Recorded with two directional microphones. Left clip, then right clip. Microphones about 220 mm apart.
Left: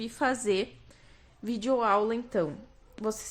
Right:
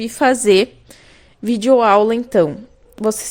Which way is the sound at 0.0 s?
35° right (ahead or behind).